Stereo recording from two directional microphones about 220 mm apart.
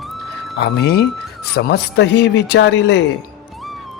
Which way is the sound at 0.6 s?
50° left (ahead or behind).